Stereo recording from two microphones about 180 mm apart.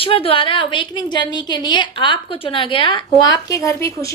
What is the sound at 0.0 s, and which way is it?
A woman's voice, 30° left (ahead or behind).